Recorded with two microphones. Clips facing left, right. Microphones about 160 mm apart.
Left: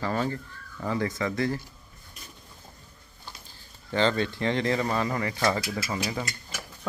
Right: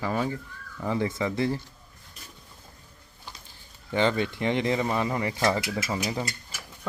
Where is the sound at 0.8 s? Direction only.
20° right (ahead or behind).